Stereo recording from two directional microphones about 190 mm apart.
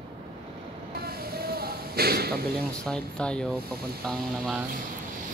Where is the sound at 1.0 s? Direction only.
55° right (ahead or behind).